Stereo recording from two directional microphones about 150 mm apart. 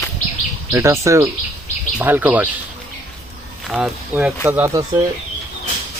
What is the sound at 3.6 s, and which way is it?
Speech, 5° right (ahead or behind).